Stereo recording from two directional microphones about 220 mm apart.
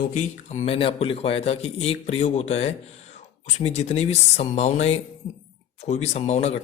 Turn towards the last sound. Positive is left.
turn(degrees=30)  # may be behind; listen again after turning